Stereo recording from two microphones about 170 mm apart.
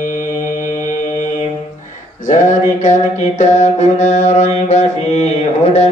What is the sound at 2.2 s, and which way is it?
Mantra, 45° left (ahead or behind).